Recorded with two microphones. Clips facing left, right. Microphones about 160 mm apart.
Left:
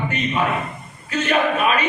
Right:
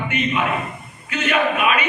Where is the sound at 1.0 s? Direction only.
35° left (ahead or behind).